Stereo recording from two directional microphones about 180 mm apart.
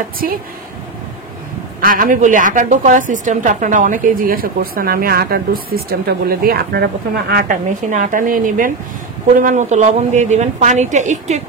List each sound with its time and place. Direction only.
1.8 s a woman's voice: 50° right (ahead or behind)